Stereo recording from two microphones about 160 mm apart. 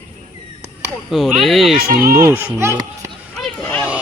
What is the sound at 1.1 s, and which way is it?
Speech, centre (ahead or behind).